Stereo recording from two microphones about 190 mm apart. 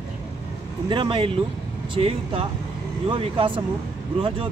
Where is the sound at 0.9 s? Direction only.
25° right (ahead or behind).